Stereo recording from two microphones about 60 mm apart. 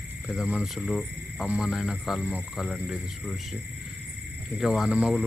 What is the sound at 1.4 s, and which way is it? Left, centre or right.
Speech, centre.